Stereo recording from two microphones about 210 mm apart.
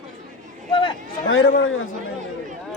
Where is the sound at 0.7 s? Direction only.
25° left (ahead or behind).